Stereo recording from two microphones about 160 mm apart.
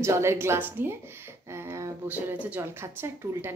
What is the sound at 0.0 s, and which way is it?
A woman's voice, 15° right (ahead or behind).